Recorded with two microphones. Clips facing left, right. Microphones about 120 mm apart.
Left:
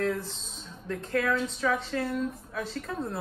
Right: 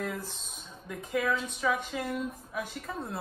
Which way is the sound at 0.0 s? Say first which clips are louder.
Left 6 dB; 10° right (ahead or behind).